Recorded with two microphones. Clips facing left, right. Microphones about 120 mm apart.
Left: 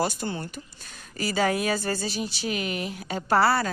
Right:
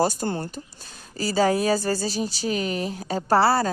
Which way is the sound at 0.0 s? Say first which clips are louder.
Right 4 dB; 40° right (ahead or behind).